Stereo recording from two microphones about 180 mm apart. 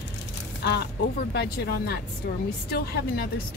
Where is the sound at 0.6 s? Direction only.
70° left (ahead or behind).